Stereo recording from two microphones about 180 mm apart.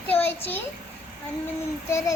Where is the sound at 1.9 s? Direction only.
15° left (ahead or behind).